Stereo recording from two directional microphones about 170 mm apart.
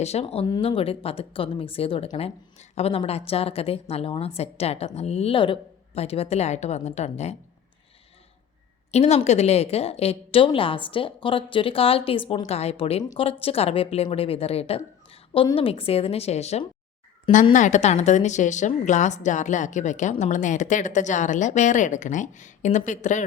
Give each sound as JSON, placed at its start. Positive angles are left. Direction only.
{"t": 0.0, "sound": "a woman's voice", "side_deg": 40}
{"t": 0.4, "sound": "a woman's voice", "side_deg": 25}
{"t": 8.9, "sound": "a woman's voice", "side_deg": 40}